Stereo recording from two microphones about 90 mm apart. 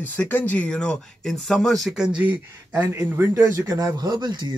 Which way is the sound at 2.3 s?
20° right (ahead or behind).